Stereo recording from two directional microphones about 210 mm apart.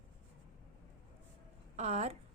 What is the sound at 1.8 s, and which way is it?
Speech, 30° right (ahead or behind).